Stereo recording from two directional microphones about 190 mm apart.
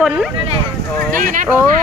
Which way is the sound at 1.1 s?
45° right (ahead or behind).